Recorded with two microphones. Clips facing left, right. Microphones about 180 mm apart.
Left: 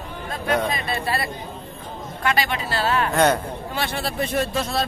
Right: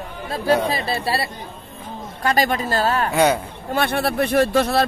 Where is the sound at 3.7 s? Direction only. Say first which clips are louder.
Right 8 dB; 55° right (ahead or behind).